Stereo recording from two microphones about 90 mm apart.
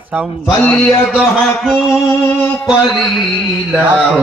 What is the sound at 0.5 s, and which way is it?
Mantra, 25° left (ahead or behind).